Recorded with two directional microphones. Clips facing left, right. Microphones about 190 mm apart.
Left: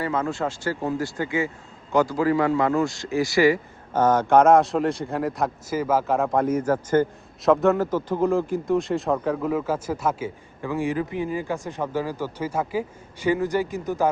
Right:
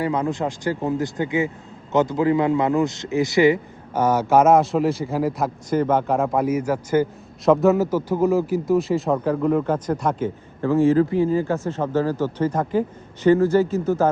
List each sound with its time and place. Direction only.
0.0 s a man's voice: 15° right (ahead or behind)
4.0 s a man's voice: 10° right (ahead or behind); by 14.1 s 15° left (ahead or behind)